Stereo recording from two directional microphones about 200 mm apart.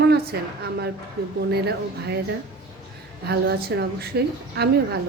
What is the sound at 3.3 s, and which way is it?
A woman's voice, 55° right (ahead or behind).